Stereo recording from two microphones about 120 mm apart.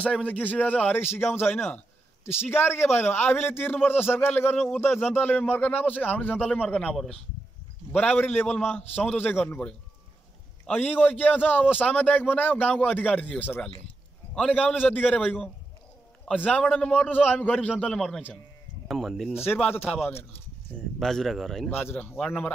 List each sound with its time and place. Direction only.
0.0 s speech: 10° left (ahead or behind)
15.2 s speech: centre (ahead or behind)
16.3 s speech: 10° left (ahead or behind)
19.3 s speech: 15° left (ahead or behind)
21.0 s speech: 5° left (ahead or behind)
21.6 s speech: 20° left (ahead or behind)